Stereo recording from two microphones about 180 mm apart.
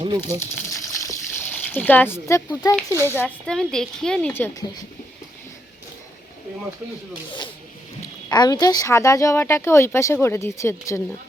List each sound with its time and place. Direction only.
0.2 s water: 15° left (ahead or behind)
3.0 s speech: 10° left (ahead or behind)
8.3 s speech: 20° left (ahead or behind)